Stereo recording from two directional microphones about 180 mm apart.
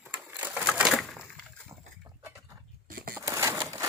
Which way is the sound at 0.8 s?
Centre (ahead or behind).